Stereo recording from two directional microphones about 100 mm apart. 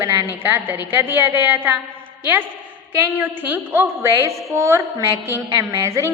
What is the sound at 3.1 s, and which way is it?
A woman's voice, 20° right (ahead or behind).